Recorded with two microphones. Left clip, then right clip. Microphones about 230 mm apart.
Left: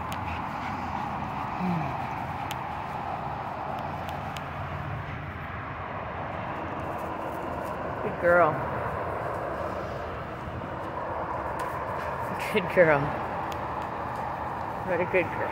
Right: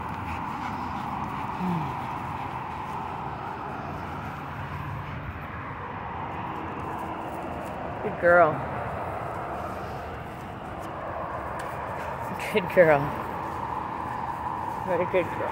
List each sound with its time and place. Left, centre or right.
8.2 s speech: centre
12.5 s speech: centre
14.9 s speech: centre